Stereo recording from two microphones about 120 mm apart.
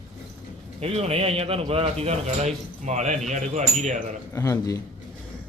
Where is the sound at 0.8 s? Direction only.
55° right (ahead or behind); by 4.0 s 75° right (ahead or behind).